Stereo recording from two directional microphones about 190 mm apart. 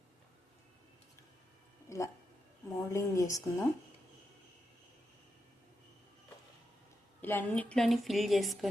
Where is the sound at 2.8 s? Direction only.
15° left (ahead or behind).